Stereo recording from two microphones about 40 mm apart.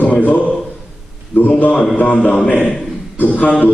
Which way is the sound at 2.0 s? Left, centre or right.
Left.